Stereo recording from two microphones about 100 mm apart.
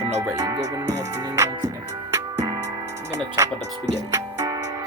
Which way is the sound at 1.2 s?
40° right (ahead or behind).